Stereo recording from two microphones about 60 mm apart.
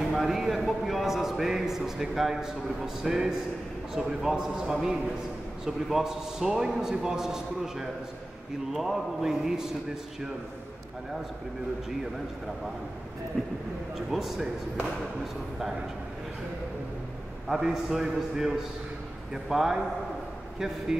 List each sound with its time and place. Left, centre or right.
0.1 s a sound: centre
3.0 s a man's voice: centre
13.9 s a man's voice: centre
17.5 s a man's voice: centre